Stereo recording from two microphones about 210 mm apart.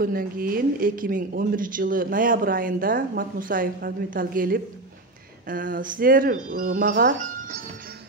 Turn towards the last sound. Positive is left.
turn(degrees=-45)  # may be behind; listen again after turning